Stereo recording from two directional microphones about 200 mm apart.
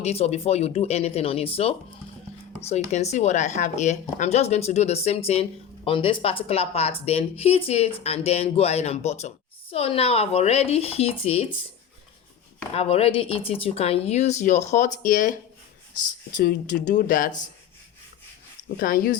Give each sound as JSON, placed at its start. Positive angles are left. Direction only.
{"t": 0.0, "sound": "speech", "side_deg": 30}
{"t": 12.7, "sound": "speech", "side_deg": 30}
{"t": 16.4, "sound": "speech", "side_deg": 45}
{"t": 18.8, "sound": "speech", "side_deg": 45}